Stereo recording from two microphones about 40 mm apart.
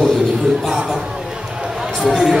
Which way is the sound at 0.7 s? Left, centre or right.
Centre.